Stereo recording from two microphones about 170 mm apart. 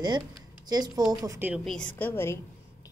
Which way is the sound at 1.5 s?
5° left (ahead or behind).